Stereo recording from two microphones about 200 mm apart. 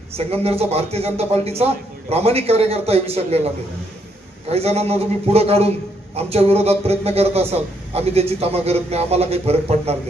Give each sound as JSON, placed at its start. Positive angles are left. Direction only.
{"t": 0.2, "sound": "a man's voice", "side_deg": -30}
{"t": 4.5, "sound": "a man's voice", "side_deg": -30}